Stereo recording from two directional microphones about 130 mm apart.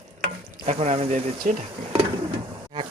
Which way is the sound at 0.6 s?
55° right (ahead or behind).